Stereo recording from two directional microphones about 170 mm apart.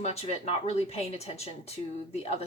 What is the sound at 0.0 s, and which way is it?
A woman's voice, 40° left (ahead or behind).